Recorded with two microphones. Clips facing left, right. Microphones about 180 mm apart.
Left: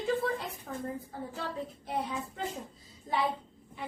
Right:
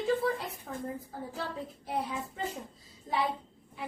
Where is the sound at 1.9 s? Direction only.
Centre (ahead or behind).